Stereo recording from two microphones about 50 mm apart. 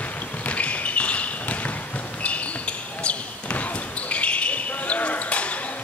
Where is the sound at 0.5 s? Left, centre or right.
Left.